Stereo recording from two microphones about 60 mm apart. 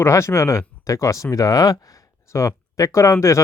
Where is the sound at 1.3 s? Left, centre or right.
Left.